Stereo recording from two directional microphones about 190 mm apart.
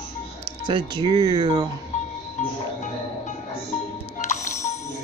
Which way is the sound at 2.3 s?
40° left (ahead or behind).